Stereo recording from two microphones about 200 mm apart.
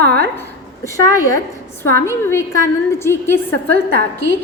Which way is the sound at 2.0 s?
15° left (ahead or behind).